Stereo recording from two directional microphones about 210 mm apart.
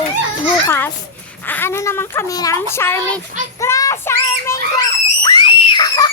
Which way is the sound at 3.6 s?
15° left (ahead or behind).